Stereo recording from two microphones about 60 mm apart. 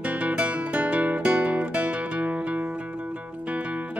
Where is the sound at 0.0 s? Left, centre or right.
Right.